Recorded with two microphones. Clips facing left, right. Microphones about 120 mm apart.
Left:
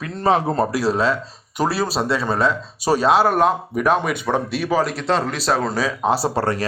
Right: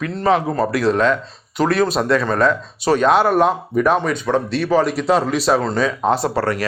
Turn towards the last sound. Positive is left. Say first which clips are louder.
# right 1 dB
turn(degrees=30)  # may be behind; listen again after turning